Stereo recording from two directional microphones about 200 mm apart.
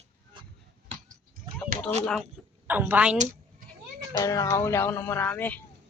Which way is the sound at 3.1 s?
40° right (ahead or behind).